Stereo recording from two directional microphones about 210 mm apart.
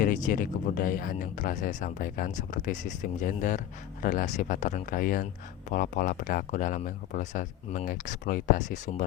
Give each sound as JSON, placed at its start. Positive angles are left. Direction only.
{"t": 0.0, "sound": "speech", "side_deg": 40}